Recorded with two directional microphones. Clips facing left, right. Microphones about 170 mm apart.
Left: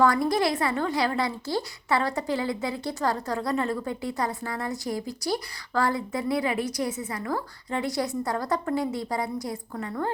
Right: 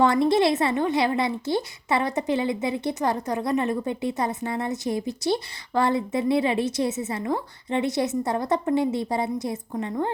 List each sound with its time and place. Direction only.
0.0 s a woman's voice: 25° right (ahead or behind)